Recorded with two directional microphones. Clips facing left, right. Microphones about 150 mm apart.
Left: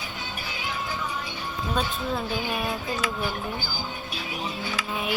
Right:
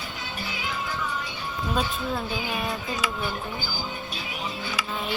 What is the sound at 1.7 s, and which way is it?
Speech, centre (ahead or behind).